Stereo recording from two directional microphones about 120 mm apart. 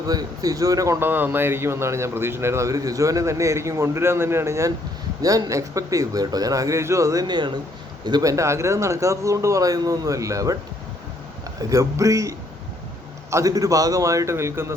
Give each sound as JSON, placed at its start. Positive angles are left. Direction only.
{"t": 0.1, "sound": "speech", "side_deg": -30}
{"t": 11.7, "sound": "speech", "side_deg": -25}
{"t": 13.3, "sound": "speech", "side_deg": -30}